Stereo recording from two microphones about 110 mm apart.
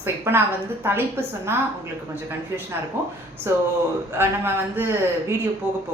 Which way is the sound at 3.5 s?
25° right (ahead or behind).